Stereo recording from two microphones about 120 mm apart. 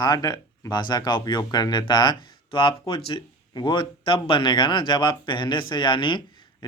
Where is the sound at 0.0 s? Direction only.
30° left (ahead or behind).